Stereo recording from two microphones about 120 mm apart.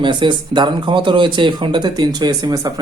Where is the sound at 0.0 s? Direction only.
40° right (ahead or behind).